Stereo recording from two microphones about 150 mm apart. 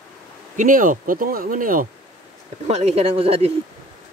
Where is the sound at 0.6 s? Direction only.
65° right (ahead or behind).